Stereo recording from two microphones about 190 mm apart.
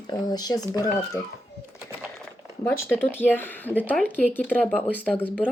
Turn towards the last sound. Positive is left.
turn(degrees=10)  # may be behind; listen again after turning